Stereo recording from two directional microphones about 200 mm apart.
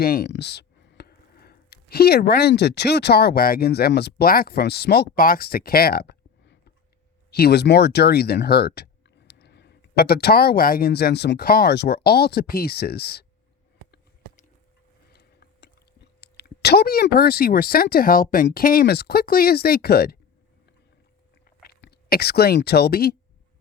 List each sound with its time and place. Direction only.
0.0 s speech: 50° left (ahead or behind)
15.1 s speech: 55° left (ahead or behind)
21.4 s a sound: 50° left (ahead or behind)